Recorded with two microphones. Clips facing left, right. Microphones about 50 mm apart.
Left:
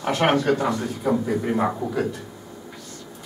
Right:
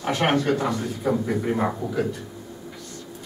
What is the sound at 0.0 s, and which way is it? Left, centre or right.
A man's voice, centre.